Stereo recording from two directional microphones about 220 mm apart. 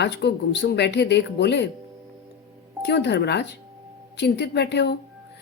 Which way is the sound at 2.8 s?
50° left (ahead or behind).